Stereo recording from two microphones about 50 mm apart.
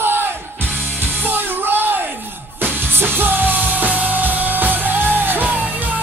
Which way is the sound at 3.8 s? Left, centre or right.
Right.